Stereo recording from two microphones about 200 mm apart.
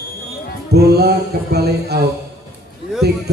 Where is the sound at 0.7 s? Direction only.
55° right (ahead or behind).